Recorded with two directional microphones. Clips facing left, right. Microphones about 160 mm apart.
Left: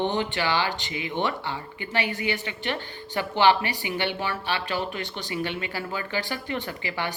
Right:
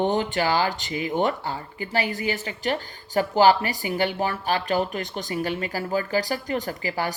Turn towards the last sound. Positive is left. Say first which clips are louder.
# right 3 dB
turn(degrees=-40)  # may be behind; listen again after turning